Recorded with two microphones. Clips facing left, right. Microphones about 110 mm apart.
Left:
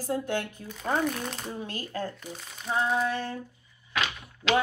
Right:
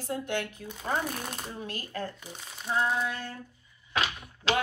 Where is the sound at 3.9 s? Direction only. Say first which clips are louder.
Even; 30° right (ahead or behind).